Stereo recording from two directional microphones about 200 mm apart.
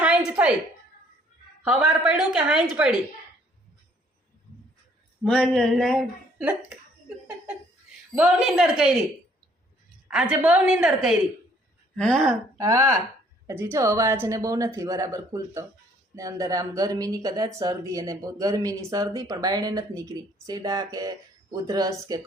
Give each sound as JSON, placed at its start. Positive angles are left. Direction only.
{"t": 0.3, "sound": "a sound", "side_deg": -5}
{"t": 1.6, "sound": "a woman's voice", "side_deg": -5}
{"t": 5.2, "sound": "a woman's voice", "side_deg": 5}
{"t": 7.9, "sound": "a woman's voice", "side_deg": -5}
{"t": 10.1, "sound": "a woman's voice", "side_deg": -5}
{"t": 12.5, "sound": "speech", "side_deg": -15}